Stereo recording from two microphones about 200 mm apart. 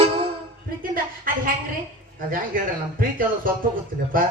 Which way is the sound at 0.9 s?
45° right (ahead or behind).